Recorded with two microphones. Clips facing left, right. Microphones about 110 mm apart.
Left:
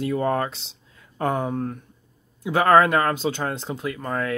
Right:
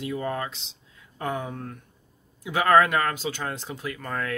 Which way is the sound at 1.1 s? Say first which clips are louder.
Left 6 dB; 40° left (ahead or behind).